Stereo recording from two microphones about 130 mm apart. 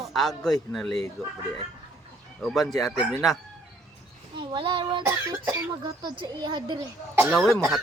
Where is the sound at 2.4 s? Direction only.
Centre (ahead or behind).